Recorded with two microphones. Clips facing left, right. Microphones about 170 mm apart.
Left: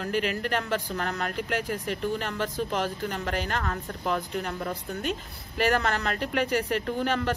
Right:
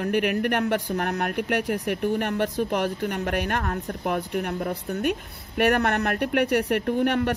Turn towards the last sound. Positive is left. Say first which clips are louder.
# right 5 dB
turn(degrees=-60)  # may be behind; listen again after turning